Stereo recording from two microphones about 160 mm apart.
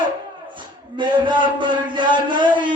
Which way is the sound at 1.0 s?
30° right (ahead or behind).